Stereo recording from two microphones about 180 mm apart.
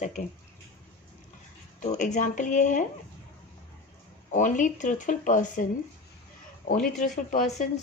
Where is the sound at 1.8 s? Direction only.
40° left (ahead or behind).